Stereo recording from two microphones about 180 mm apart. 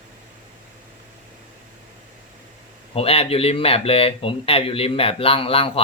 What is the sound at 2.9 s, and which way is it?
Speech, 30° left (ahead or behind).